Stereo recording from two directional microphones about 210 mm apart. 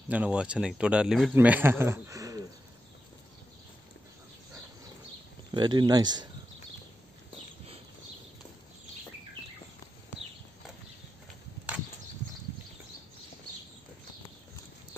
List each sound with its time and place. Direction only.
0.1 s speech: 5° right (ahead or behind)
5.5 s speech: 20° right (ahead or behind)